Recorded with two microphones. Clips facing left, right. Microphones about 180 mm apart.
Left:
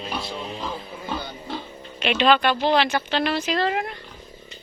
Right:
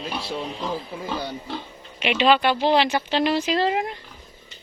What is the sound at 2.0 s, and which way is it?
Speech, 15° right (ahead or behind).